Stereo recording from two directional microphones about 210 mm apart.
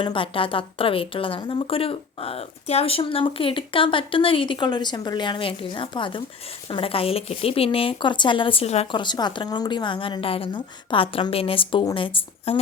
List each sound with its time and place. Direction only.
0.0 s a woman's voice: 25° left (ahead or behind)